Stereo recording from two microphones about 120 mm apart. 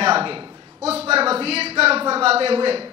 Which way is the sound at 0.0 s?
50° right (ahead or behind).